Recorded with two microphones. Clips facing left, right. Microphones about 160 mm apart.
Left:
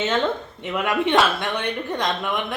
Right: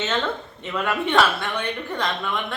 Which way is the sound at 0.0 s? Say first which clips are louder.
Left 3 dB; 15° left (ahead or behind).